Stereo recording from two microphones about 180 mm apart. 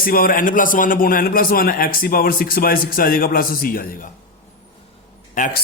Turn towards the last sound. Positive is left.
turn(degrees=45)  # may be behind; listen again after turning